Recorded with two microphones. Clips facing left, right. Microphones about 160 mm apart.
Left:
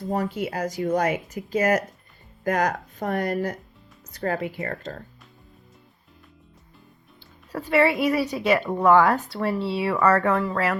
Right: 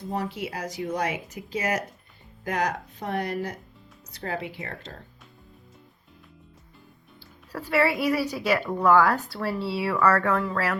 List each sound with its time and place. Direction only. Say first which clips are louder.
0.1 s speech: left 4 dB; 45° left (ahead or behind)
7.5 s a woman's voice: left 3 dB; 20° left (ahead or behind)